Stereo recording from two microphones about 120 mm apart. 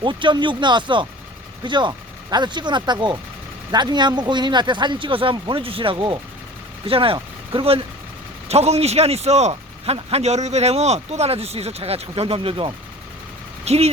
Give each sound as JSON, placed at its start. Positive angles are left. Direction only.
{"t": 0.0, "sound": "a man's voice", "side_deg": -40}
{"t": 13.7, "sound": "a man's voice", "side_deg": -60}